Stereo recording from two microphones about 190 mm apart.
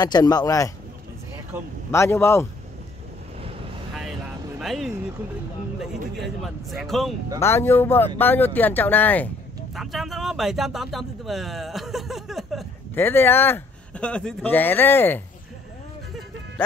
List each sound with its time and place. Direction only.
0.0 s speech: 20° left (ahead or behind)
1.9 s speech: 15° left (ahead or behind)
4.6 s speech: centre (ahead or behind)
6.1 s speech: centre (ahead or behind)
7.3 s speech: 15° left (ahead or behind)
12.9 s speech: 10° left (ahead or behind)